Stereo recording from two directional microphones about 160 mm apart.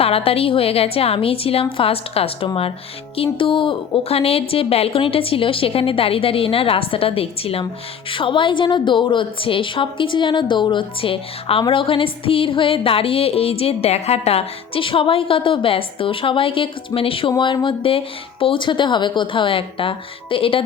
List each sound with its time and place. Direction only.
0.0 s a woman's voice: 35° left (ahead or behind)